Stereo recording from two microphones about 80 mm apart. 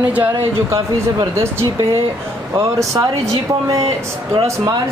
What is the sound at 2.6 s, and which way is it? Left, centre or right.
Speech, right.